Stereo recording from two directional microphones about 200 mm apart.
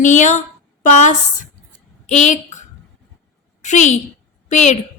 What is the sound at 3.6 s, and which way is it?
A woman's voice, 35° left (ahead or behind).